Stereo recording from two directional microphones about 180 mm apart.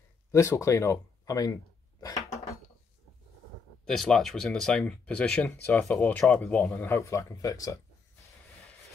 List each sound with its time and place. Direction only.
0.3 s speech: 15° left (ahead or behind)
3.8 s speech: centre (ahead or behind); by 7.8 s 20° left (ahead or behind)